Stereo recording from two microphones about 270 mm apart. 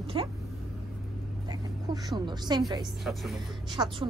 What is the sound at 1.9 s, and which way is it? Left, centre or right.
Speech, centre.